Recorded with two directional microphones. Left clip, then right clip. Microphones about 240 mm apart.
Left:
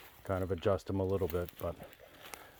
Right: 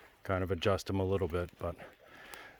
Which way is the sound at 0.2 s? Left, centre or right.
Right.